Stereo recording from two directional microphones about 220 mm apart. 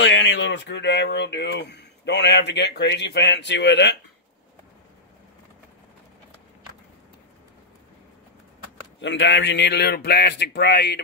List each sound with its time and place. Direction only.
0.0 s speech: 55° left (ahead or behind)
9.0 s speech: 55° left (ahead or behind)